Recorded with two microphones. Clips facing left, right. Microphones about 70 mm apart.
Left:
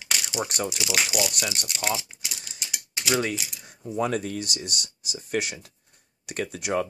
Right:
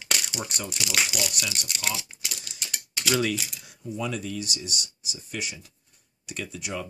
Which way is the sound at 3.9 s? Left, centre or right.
Left.